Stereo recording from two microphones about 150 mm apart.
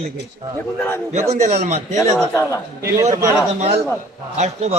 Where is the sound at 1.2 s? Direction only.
50° right (ahead or behind).